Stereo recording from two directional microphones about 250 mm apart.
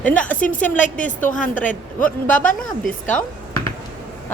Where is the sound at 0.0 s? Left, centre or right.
Centre.